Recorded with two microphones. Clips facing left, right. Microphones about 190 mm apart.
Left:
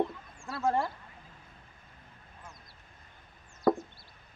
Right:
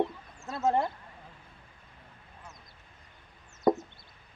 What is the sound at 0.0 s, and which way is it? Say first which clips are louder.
Chicken: right 1 dB; 20° right (ahead or behind).